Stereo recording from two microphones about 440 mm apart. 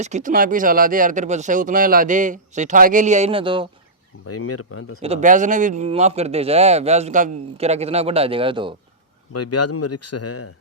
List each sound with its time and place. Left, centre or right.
0.0 s speech: centre
4.3 s speech: left
5.0 s speech: centre
9.3 s speech: left